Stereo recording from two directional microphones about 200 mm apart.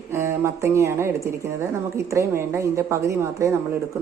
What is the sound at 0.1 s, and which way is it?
A woman's voice, 10° right (ahead or behind).